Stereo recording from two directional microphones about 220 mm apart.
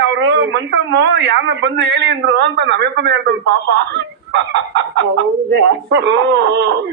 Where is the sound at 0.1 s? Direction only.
55° right (ahead or behind).